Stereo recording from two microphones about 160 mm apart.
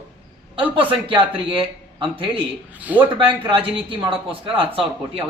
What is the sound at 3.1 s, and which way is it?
Speech, 30° right (ahead or behind).